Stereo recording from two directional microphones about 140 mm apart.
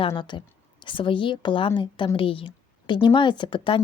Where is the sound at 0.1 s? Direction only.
35° left (ahead or behind).